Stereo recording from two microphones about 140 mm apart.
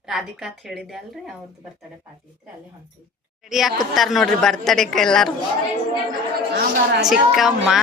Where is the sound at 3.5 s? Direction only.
Centre (ahead or behind).